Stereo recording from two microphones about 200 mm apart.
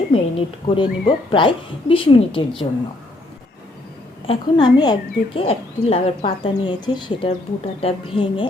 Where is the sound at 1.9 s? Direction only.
25° left (ahead or behind).